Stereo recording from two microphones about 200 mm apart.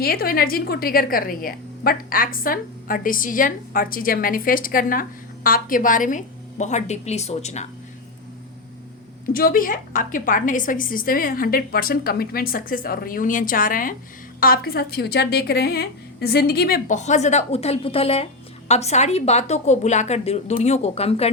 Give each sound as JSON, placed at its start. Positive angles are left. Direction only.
{"t": 0.0, "sound": "a woman's voice", "side_deg": 50}
{"t": 9.3, "sound": "a woman's voice", "side_deg": 45}